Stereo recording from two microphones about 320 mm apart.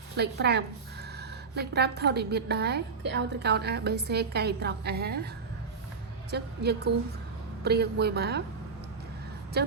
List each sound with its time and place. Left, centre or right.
0.2 s a woman's voice: right
6.3 s a woman's voice: right
9.6 s a woman's voice: right